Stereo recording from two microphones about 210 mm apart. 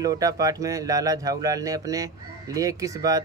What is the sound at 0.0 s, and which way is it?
Speech, 15° right (ahead or behind).